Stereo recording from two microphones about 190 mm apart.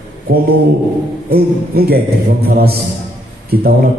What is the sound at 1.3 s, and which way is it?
A man's voice, 55° right (ahead or behind).